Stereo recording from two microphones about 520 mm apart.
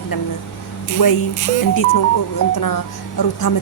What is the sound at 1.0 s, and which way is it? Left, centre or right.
Speech, left.